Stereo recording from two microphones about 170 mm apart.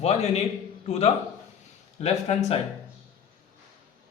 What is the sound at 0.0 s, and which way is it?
Speech, 40° left (ahead or behind).